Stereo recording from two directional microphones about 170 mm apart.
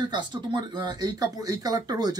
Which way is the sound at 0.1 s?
25° right (ahead or behind).